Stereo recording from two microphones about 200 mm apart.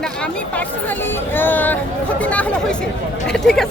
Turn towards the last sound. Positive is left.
turn(degrees=0)  # may be behind; listen again after turning